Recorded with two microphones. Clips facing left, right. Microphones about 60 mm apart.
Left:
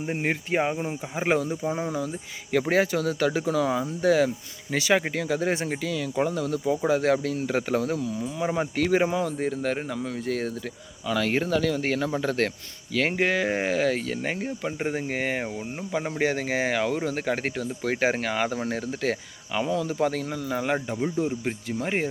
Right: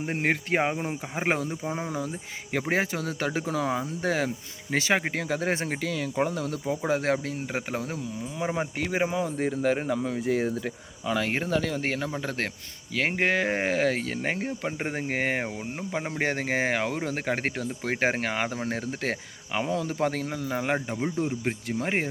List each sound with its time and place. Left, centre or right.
0.0 s speech: right
1.5 s speech: centre
2.5 s speech: right
6.7 s speech: right
12.1 s speech: centre
13.2 s speech: right
15.9 s speech: right